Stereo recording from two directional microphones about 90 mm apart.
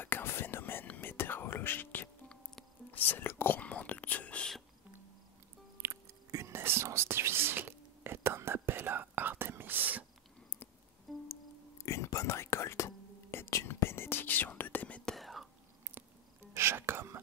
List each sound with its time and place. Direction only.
0.0 s whispering: 25° left (ahead or behind); by 4.6 s 5° left (ahead or behind)
5.8 s whispering: 30° right (ahead or behind)
11.1 s music: centre (ahead or behind)
11.8 s whispering: 35° left (ahead or behind); by 15.1 s 15° left (ahead or behind)
15.1 s whispering: centre (ahead or behind)
16.5 s whispering: 30° right (ahead or behind)